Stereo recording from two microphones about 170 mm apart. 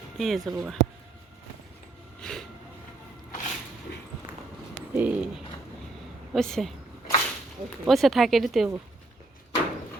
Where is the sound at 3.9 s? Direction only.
80° left.